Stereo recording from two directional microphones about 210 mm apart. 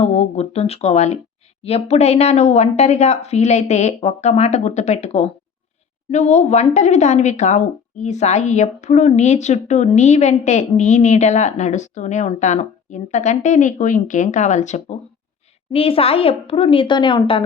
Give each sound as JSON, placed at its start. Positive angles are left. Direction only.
{"t": 0.0, "sound": "a woman's voice", "side_deg": 30}